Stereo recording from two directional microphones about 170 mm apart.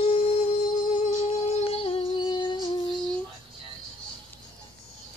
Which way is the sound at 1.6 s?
35° left (ahead or behind).